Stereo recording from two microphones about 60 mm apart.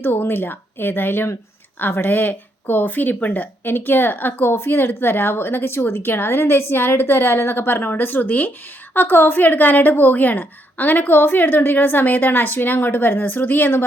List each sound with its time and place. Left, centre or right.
0.0 s speech: left